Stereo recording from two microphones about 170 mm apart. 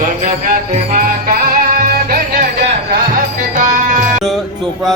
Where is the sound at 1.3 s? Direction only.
60° right (ahead or behind).